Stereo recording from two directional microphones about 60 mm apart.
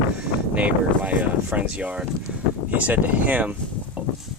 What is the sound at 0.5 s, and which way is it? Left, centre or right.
Speech, right.